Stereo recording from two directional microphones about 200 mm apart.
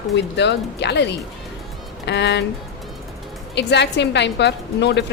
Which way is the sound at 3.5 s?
60° left (ahead or behind).